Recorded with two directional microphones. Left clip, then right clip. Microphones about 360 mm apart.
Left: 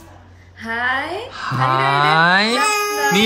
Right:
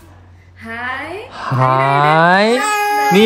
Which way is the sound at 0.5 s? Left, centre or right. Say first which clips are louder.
Left 3 dB; centre.